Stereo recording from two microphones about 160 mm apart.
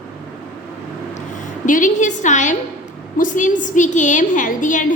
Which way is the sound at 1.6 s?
55° left (ahead or behind).